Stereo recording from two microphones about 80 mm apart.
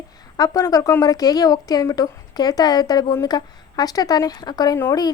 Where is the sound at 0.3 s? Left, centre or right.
Left.